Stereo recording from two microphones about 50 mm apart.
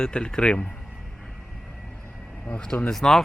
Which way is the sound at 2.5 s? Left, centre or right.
Left.